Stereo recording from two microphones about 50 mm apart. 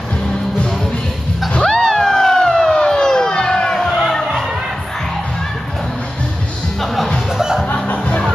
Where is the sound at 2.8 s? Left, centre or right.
Centre.